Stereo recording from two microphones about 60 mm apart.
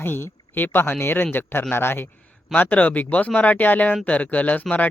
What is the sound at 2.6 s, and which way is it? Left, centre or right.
Speech, left.